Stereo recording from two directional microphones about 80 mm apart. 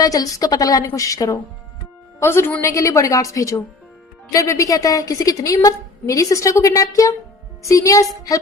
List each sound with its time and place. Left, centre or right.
0.0 s a woman's voice: left
2.1 s a woman's voice: left